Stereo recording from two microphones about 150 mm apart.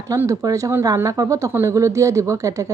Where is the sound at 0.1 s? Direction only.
20° right (ahead or behind).